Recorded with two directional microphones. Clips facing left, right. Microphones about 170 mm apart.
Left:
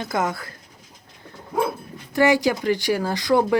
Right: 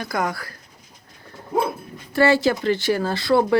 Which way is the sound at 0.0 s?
20° left (ahead or behind).